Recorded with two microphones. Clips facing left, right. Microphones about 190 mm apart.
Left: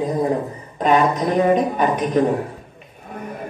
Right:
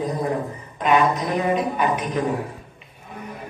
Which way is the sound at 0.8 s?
40° left (ahead or behind).